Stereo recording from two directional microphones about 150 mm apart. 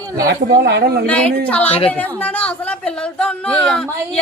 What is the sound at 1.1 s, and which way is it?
Speech, 10° left (ahead or behind).